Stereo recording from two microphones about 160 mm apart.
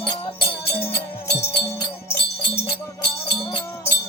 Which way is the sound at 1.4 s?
15° left (ahead or behind).